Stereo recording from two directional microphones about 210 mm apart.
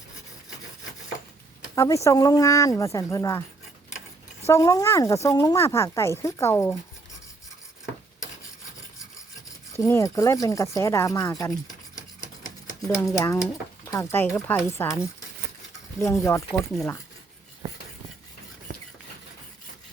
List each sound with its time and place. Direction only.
1.7 s speech: 15° left (ahead or behind)
4.4 s speech: 15° left (ahead or behind)
9.7 s speech: 15° left (ahead or behind)
16.0 s speech: 15° left (ahead or behind)
18.7 s a sound: 45° right (ahead or behind)